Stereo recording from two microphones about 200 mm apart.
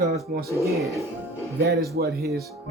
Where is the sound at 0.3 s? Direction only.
50° right (ahead or behind).